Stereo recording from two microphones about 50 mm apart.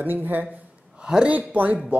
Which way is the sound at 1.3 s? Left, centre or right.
Right.